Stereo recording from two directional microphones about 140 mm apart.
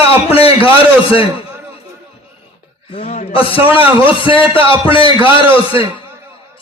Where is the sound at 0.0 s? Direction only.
45° left (ahead or behind).